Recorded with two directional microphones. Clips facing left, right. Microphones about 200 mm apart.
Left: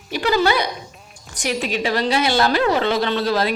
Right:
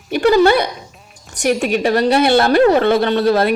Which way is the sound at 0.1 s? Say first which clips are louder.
Right 7 dB; 55° right (ahead or behind).